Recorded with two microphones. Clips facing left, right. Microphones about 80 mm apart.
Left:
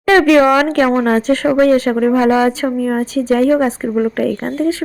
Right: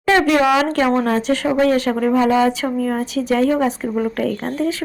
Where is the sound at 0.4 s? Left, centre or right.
Left.